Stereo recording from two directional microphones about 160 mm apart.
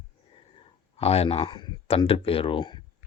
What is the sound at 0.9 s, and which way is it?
Speech, 40° left (ahead or behind).